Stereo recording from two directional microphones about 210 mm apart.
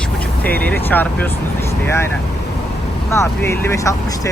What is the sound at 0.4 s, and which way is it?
Speech, 5° left (ahead or behind).